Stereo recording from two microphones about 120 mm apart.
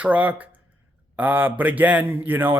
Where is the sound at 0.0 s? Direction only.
10° right (ahead or behind).